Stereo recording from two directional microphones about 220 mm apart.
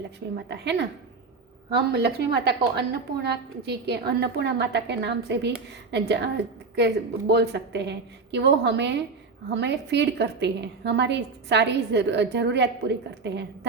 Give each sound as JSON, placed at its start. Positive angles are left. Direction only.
{"t": 0.3, "sound": "a woman's voice", "side_deg": -50}